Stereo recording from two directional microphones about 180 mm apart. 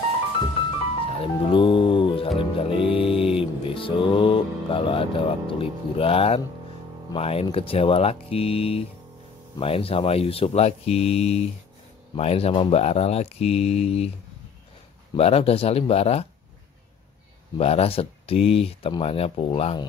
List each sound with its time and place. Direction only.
1.0 s music: 30° left (ahead or behind)
7.1 s speech: 30° left (ahead or behind)
15.1 s speech: 35° left (ahead or behind)
17.6 s speech: 35° left (ahead or behind)